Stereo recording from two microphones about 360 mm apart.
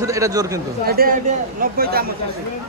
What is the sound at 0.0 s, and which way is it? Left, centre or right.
Speech, centre.